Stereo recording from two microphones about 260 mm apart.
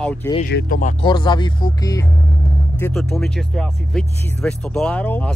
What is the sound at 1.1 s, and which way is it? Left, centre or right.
Speech, centre.